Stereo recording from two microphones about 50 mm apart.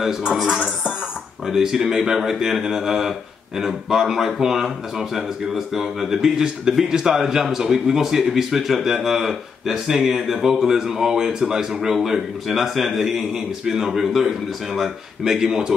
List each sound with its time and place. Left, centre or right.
1.5 s speech: centre